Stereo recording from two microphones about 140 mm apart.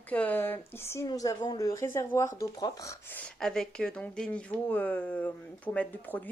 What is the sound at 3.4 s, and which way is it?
Speech, 5° left (ahead or behind).